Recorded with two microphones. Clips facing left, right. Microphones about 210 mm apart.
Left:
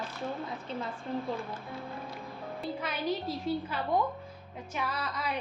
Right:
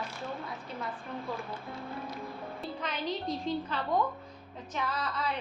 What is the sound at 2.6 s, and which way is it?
A woman's voice, 10° left (ahead or behind).